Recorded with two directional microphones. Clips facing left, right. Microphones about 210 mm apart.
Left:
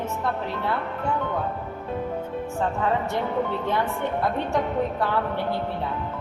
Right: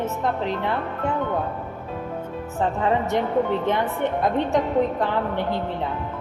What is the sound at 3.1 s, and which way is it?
Speech, 20° right (ahead or behind).